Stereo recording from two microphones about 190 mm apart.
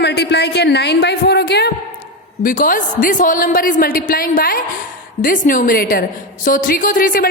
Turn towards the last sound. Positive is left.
turn(degrees=45)  # may be behind; listen again after turning